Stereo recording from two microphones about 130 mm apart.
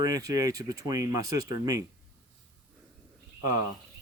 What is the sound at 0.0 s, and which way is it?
Speech, 25° right (ahead or behind).